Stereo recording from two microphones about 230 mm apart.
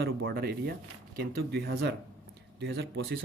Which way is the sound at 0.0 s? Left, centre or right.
Right.